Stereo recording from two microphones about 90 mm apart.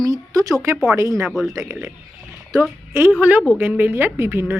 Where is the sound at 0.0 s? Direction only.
40° right (ahead or behind).